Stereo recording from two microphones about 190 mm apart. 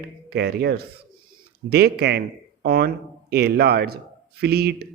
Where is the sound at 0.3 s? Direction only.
60° right (ahead or behind).